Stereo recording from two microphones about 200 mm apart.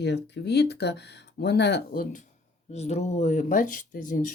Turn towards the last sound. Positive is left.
turn(degrees=45)  # may be behind; listen again after turning